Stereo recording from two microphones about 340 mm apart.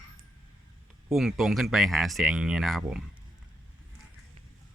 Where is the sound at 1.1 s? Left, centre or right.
Centre.